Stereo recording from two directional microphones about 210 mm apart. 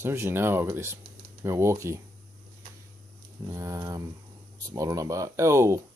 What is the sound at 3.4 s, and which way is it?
Speech, 15° right (ahead or behind).